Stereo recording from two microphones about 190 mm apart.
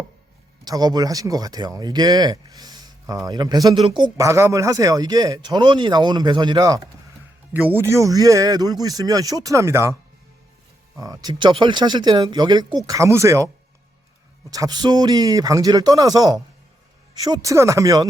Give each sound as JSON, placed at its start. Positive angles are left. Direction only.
{"t": 0.6, "sound": "speech", "side_deg": -20}
{"t": 10.9, "sound": "speech", "side_deg": -20}
{"t": 14.5, "sound": "speech", "side_deg": -20}